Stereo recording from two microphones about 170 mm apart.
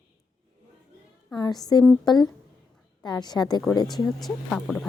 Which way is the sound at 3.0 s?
25° left (ahead or behind).